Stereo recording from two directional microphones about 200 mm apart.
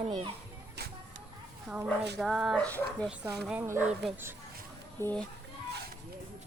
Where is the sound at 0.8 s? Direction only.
55° right (ahead or behind).